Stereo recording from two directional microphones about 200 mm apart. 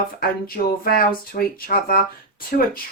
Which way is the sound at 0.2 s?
50° left (ahead or behind).